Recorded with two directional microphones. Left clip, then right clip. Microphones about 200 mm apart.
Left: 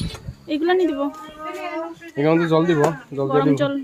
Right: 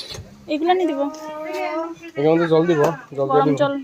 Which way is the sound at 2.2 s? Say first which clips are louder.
Right 1 dB; 55° left (ahead or behind).